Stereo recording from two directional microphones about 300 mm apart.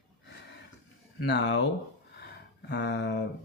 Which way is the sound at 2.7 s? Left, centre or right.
Left.